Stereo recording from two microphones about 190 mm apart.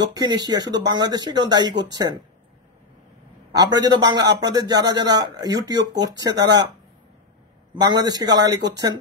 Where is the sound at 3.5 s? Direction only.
20° right (ahead or behind).